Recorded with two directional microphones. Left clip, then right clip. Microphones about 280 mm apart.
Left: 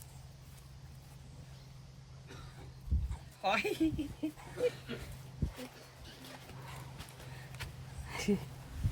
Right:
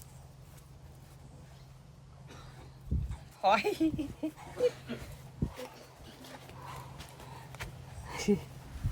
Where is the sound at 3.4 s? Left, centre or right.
Centre.